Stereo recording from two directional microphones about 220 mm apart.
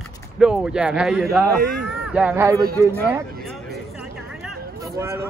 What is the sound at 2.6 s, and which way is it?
Speech, 45° right (ahead or behind).